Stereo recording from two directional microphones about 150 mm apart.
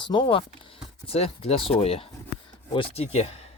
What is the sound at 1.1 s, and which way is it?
Speech, 40° left (ahead or behind).